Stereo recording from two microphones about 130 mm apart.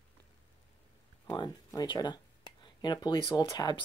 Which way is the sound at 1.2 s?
30° left (ahead or behind).